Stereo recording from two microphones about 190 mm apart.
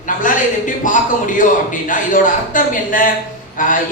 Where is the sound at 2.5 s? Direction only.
45° left (ahead or behind).